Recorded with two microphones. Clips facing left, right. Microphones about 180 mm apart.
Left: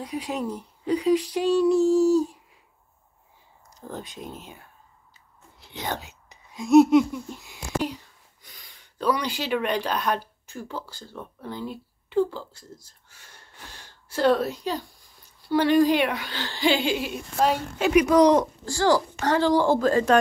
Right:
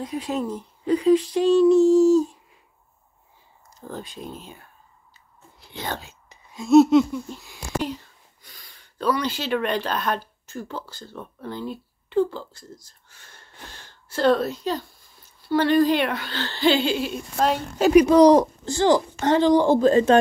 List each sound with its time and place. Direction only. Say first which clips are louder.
0.0 s speech: right 3 dB; 10° left (ahead or behind)
3.7 s speech: right 1 dB; 15° left (ahead or behind)
17.7 s speech: right 5 dB; 35° right (ahead or behind)
18.7 s speech: right 1 dB; 20° right (ahead or behind)